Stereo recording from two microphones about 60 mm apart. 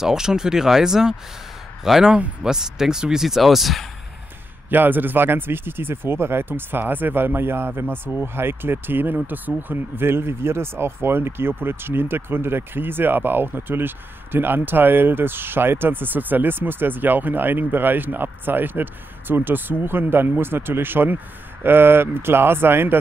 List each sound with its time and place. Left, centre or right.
0.0 s speech: centre
4.6 s speech: right